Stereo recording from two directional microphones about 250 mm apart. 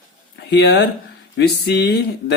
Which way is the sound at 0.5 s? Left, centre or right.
Left.